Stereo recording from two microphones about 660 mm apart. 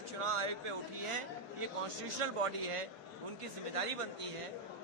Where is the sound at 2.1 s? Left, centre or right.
Right.